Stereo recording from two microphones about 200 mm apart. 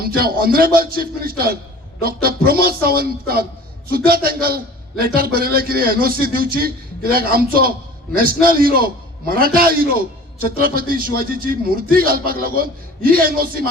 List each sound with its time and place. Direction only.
0.0 s a man's voice: 50° right (ahead or behind)